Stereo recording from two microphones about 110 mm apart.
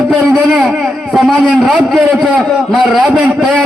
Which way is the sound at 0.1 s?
5° left (ahead or behind).